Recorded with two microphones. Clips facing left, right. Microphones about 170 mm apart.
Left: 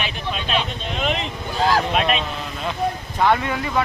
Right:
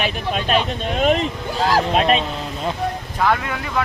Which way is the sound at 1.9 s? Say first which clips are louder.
Right 4 dB; 35° right (ahead or behind).